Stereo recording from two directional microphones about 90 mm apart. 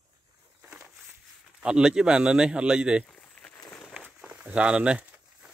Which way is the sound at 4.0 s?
15° right (ahead or behind).